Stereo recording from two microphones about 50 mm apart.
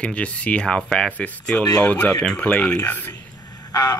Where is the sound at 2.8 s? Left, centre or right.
Left.